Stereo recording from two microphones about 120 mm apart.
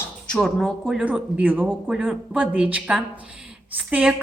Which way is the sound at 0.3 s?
5° left (ahead or behind).